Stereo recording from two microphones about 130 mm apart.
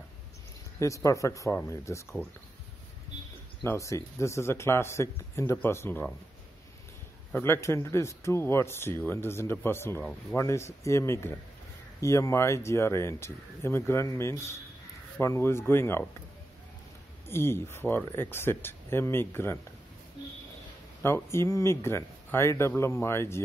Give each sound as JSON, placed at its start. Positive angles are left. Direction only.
{"t": 0.7, "sound": "speech", "side_deg": 25}
{"t": 3.6, "sound": "speech", "side_deg": 25}
{"t": 7.3, "sound": "speech", "side_deg": 20}
{"t": 17.3, "sound": "speech", "side_deg": 20}
{"t": 21.0, "sound": "speech", "side_deg": 20}